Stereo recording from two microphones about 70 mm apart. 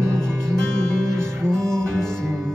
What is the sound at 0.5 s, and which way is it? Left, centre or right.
Music, centre.